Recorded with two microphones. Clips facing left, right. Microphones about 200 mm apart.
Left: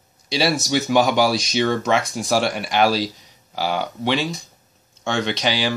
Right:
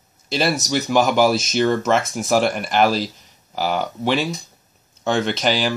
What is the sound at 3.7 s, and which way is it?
Speech, 5° right (ahead or behind).